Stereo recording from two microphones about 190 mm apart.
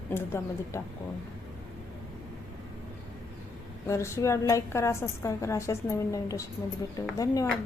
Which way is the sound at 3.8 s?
15° left (ahead or behind).